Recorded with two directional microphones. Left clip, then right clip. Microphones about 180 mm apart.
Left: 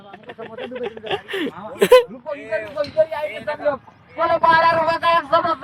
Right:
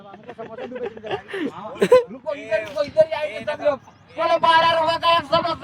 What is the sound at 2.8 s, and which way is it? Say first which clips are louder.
Speech: right 1 dB; 30° right (ahead or behind).